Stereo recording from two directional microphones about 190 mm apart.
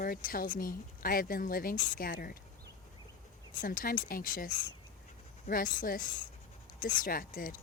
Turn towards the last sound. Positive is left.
turn(degrees=45)  # may be behind; listen again after turning